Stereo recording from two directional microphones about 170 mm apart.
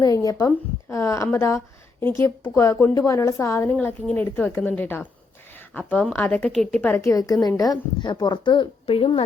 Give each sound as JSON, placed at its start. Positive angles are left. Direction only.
{"t": 0.0, "sound": "a woman's voice", "side_deg": 20}